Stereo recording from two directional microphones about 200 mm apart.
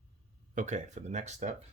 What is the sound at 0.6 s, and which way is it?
Speech, 35° right (ahead or behind).